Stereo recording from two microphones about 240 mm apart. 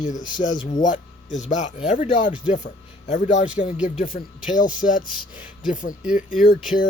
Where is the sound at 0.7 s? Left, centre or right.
Left.